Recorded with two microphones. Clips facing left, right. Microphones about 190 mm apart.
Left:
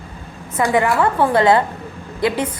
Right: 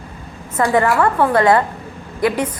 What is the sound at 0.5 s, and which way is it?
A woman's voice, 15° left (ahead or behind).